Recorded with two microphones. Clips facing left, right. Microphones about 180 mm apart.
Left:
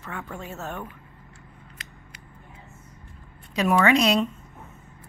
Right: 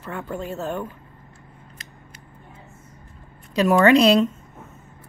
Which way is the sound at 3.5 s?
30° right (ahead or behind).